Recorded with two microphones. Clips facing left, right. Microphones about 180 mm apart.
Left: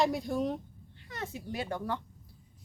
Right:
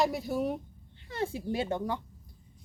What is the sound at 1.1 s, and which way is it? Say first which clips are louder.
Speech: right 7 dB; 30° right (ahead or behind).